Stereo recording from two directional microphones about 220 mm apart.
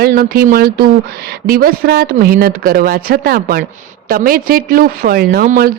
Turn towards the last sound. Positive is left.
turn(degrees=-40)  # may be behind; listen again after turning